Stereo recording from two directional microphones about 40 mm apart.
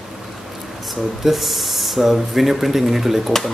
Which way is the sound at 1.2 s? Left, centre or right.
Centre.